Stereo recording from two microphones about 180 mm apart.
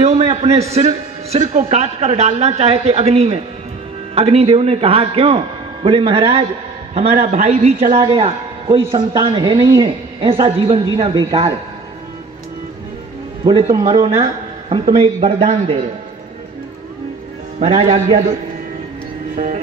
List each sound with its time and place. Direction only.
0.0 s a man's voice: 35° right (ahead or behind)
13.4 s a man's voice: 30° right (ahead or behind)
17.6 s a man's voice: 40° right (ahead or behind)
19.3 s music: 45° right (ahead or behind)